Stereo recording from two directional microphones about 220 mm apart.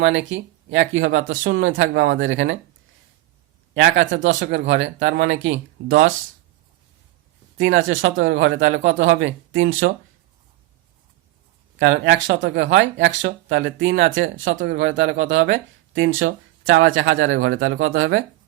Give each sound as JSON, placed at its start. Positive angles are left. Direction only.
{"t": 0.0, "sound": "speech", "side_deg": -60}
{"t": 3.8, "sound": "speech", "side_deg": -55}
{"t": 7.6, "sound": "speech", "side_deg": -65}
{"t": 11.8, "sound": "speech", "side_deg": -60}